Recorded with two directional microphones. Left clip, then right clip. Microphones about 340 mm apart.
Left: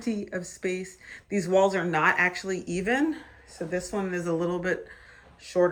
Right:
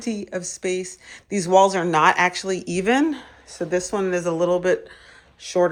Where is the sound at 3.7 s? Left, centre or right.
Centre.